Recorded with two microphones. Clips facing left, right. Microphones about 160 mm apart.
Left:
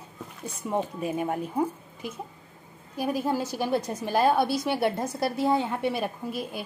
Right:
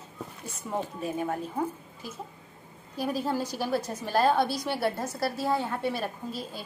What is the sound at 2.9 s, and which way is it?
Speech, 15° left (ahead or behind).